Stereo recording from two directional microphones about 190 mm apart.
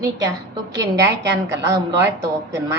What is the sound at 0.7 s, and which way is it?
Speech, 15° right (ahead or behind).